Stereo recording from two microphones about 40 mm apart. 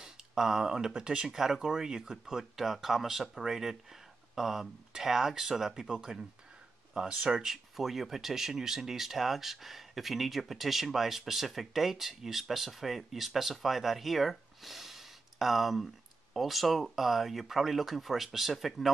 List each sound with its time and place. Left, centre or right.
0.0 s speech: centre
1.3 s speech: centre
7.1 s speech: right
7.4 s speech: centre